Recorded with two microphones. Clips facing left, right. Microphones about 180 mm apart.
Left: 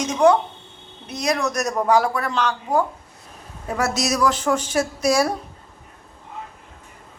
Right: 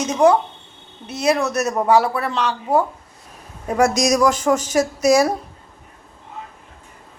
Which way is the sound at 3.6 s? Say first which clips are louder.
Right 6 dB; 15° right (ahead or behind).